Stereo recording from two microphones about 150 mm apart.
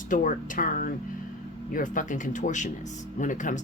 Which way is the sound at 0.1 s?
60° left (ahead or behind).